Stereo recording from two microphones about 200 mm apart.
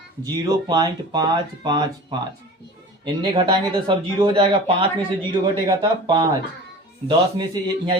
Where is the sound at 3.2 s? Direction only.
25° right (ahead or behind).